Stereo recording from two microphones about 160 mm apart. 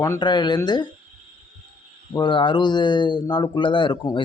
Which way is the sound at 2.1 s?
30° left (ahead or behind).